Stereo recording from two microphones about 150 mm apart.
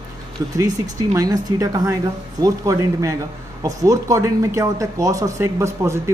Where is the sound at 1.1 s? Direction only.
25° right (ahead or behind).